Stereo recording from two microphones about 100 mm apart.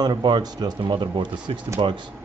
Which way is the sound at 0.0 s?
45° right (ahead or behind).